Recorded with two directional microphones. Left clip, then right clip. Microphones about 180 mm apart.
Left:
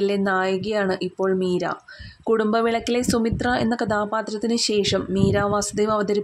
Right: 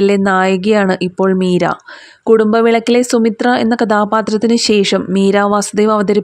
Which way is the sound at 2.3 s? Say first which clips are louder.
Right 10 dB; 35° right (ahead or behind).